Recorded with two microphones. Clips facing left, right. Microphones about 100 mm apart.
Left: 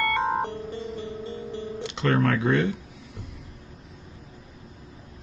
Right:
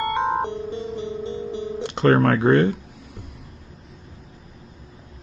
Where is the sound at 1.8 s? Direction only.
50° right (ahead or behind).